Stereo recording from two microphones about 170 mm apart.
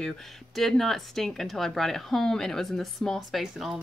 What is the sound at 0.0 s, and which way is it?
Speech, centre (ahead or behind).